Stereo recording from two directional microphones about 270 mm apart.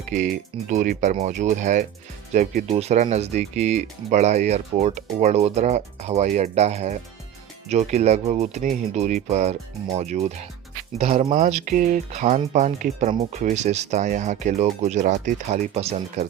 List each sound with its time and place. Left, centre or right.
0.7 s speech: right